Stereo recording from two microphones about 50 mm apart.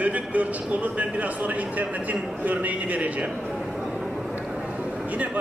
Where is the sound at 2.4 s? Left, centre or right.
Right.